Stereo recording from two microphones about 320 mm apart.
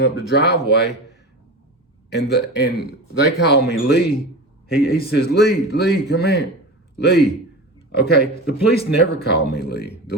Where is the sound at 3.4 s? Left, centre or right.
Left.